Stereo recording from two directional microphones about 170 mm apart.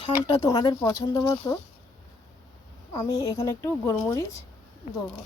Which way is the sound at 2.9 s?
20° left (ahead or behind).